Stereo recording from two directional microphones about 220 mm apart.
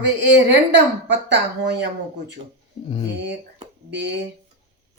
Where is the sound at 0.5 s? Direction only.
50° right (ahead or behind).